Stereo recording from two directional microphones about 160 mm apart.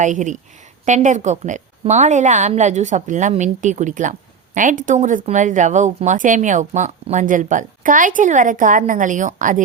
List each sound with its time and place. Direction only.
0.0 s speech: 50° right (ahead or behind)